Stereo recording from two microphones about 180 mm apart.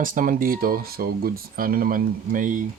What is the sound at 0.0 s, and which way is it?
Speech, 50° right (ahead or behind).